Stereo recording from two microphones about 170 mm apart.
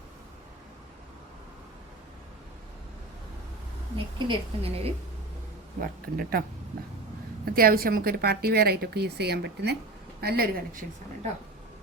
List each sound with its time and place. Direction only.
3.9 s speech: 30° right (ahead or behind)
5.8 s a woman's voice: 55° right (ahead or behind)
7.4 s a woman's voice: 60° right (ahead or behind); by 9.7 s 80° right
10.2 s a woman's voice: 65° right (ahead or behind)